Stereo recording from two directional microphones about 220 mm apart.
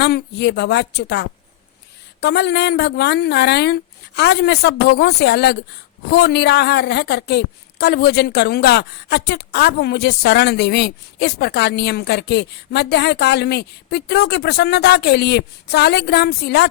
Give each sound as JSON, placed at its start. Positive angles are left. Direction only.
{"t": 0.0, "sound": "a woman's voice", "side_deg": 50}